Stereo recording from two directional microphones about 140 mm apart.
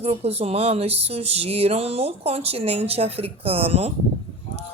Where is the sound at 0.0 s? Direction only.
45° right (ahead or behind).